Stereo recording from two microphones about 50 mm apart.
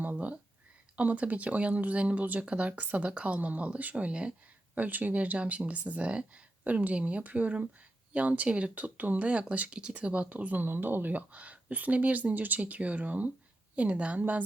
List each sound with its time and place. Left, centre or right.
0.0 s a sound: right
0.9 s speech: right
4.8 s speech: right
10.7 s speech: right
11.3 s speech: right